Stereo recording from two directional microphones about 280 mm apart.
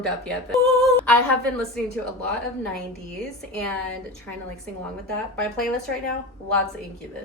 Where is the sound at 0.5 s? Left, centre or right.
Centre.